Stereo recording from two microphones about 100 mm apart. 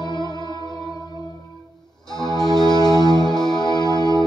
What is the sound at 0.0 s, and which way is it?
Music, 45° left (ahead or behind).